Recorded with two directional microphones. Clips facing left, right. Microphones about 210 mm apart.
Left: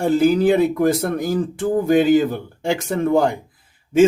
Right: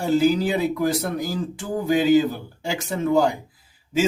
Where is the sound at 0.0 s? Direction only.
55° left (ahead or behind).